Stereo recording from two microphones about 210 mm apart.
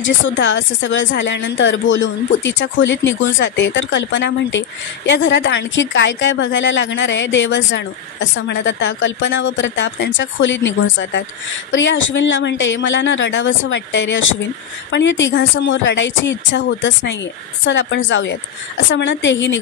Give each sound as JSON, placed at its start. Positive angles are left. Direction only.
{"t": 0.0, "sound": "a woman's voice", "side_deg": 60}